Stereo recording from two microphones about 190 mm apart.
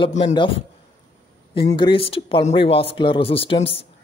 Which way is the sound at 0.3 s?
25° left (ahead or behind).